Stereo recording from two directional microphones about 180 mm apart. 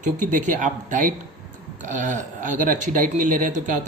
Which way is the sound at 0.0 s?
45° right (ahead or behind).